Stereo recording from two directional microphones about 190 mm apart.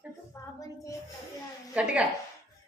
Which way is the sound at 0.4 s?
15° left (ahead or behind).